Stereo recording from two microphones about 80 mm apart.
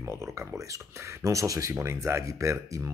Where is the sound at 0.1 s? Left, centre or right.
Right.